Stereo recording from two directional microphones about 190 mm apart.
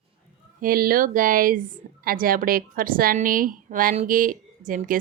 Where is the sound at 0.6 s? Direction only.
50° right (ahead or behind).